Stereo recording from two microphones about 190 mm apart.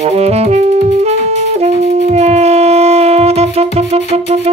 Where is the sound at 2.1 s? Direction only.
35° right (ahead or behind).